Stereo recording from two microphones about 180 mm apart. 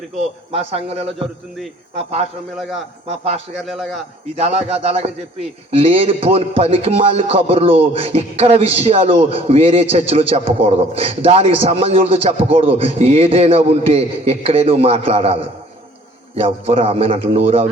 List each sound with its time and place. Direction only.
0.5 s speech: 35° right (ahead or behind)
3.6 s a man's voice: centre (ahead or behind)
4.4 s speech: 35° right (ahead or behind)